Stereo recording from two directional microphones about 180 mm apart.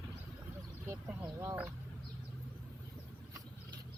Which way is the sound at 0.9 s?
15° right (ahead or behind).